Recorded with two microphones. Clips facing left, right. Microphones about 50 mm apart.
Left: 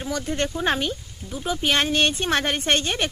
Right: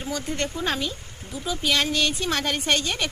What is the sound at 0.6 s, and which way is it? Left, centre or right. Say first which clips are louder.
Speech: left 3 dB; left.